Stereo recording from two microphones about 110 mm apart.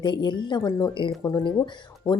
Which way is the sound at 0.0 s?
45° left (ahead or behind).